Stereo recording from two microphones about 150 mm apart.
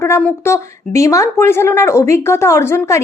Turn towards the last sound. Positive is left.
turn(degrees=20)  # may be behind; listen again after turning